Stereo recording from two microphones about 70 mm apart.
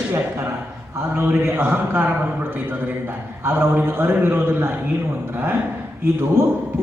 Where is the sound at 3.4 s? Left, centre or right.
Right.